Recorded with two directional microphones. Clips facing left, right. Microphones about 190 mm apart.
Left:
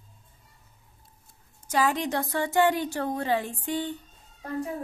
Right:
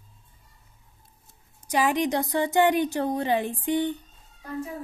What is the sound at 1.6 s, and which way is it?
A woman's voice, 15° right (ahead or behind).